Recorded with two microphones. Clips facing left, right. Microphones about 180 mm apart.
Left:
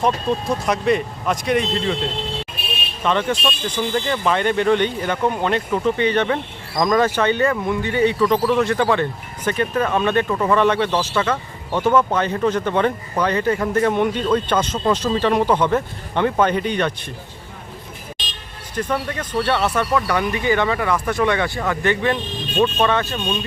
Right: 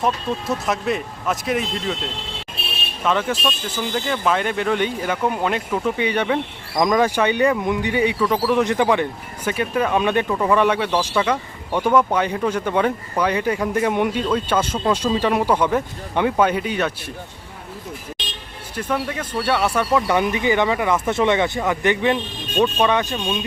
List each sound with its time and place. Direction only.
0.0 s speech: centre (ahead or behind)
18.8 s speech: 10° right (ahead or behind)